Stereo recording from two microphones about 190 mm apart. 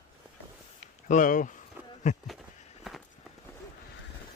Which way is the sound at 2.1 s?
40° left (ahead or behind).